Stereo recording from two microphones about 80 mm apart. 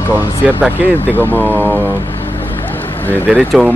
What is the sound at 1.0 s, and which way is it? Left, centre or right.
Speech, left.